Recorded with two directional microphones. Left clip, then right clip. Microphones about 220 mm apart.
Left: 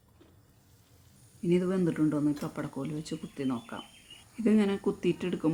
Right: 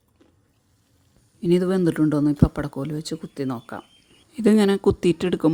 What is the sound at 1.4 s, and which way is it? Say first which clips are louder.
Speech: right 8 dB; 40° right (ahead or behind).